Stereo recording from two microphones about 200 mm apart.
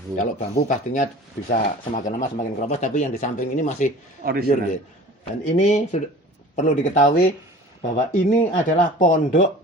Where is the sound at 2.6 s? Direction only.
35° left (ahead or behind).